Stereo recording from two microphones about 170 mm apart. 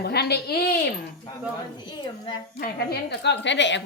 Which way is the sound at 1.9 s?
25° left (ahead or behind).